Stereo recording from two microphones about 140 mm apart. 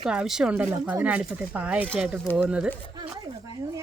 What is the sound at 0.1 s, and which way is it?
Speech, 5° right (ahead or behind).